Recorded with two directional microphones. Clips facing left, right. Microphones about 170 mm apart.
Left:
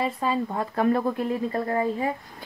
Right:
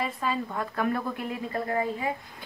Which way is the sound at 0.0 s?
30° left (ahead or behind).